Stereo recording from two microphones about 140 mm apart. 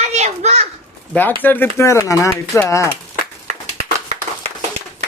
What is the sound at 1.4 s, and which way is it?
Speech, 15° left (ahead or behind).